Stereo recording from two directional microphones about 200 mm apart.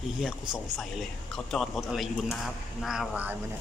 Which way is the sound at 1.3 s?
Centre (ahead or behind).